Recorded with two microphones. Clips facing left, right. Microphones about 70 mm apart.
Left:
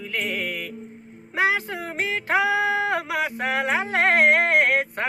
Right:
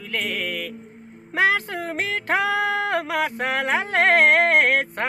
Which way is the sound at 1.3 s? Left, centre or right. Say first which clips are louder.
Right 2 dB; right.